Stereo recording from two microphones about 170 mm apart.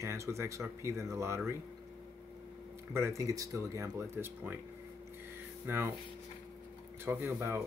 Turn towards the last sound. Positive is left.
turn(degrees=-10)  # may be behind; listen again after turning